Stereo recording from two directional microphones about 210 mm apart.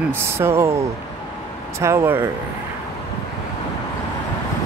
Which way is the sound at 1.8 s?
15° right (ahead or behind).